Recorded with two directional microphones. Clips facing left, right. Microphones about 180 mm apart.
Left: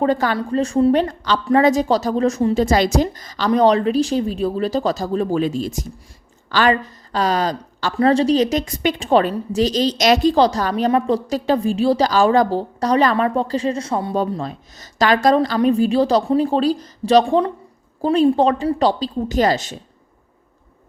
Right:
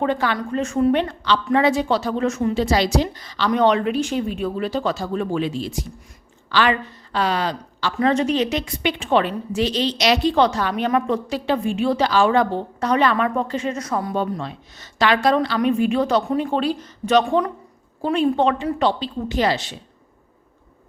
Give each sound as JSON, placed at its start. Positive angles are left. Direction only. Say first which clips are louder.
{"t": 0.0, "sound": "a woman's voice", "louder": "left 3 dB", "side_deg": 40}
{"t": 2.6, "sound": "a woman's voice", "louder": "left 3 dB", "side_deg": 45}